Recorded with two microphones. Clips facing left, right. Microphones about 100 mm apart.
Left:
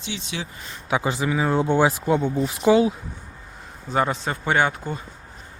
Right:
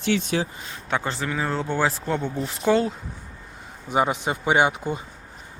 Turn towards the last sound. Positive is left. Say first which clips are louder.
# right 1 dB
turn(degrees=-15)  # may be behind; listen again after turning